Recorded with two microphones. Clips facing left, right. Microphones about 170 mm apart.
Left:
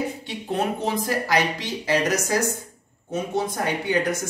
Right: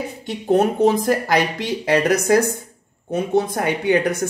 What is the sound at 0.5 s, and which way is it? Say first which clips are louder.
Speech: right 9 dB; 45° right (ahead or behind).